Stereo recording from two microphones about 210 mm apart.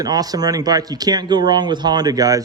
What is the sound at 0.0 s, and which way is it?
Speech, 20° right (ahead or behind).